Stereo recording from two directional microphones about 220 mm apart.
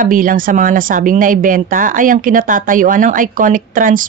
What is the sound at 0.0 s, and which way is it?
Speech, 40° right (ahead or behind).